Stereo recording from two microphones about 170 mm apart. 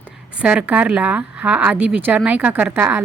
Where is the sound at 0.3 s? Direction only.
10° right (ahead or behind).